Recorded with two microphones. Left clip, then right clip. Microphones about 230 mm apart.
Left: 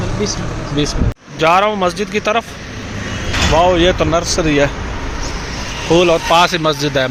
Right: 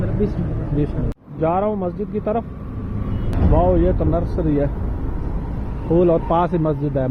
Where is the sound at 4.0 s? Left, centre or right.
Left.